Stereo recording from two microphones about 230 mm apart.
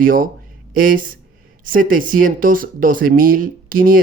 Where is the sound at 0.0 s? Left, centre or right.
Right.